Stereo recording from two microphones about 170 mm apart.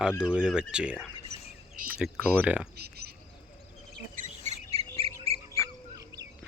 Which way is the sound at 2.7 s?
70° right (ahead or behind).